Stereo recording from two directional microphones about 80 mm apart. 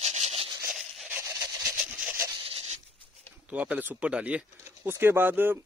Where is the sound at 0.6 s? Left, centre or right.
Centre.